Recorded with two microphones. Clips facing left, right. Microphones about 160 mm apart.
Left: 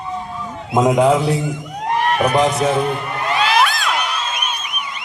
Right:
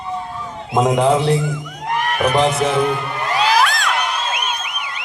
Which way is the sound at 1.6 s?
30° left (ahead or behind).